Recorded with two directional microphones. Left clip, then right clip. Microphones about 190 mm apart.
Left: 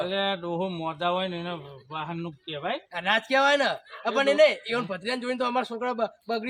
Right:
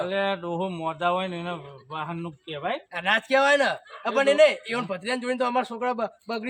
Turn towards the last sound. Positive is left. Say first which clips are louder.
# left 1 dB
turn(degrees=-15)  # may be behind; listen again after turning